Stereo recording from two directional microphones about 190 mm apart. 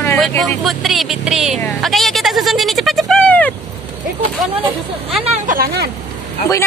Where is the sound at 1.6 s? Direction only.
Centre (ahead or behind).